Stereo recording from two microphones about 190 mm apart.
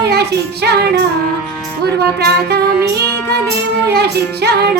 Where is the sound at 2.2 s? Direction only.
60° right (ahead or behind).